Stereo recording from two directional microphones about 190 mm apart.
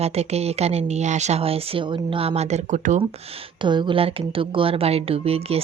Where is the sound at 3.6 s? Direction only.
25° right (ahead or behind).